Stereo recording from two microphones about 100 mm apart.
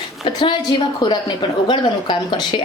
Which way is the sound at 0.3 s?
55° left (ahead or behind).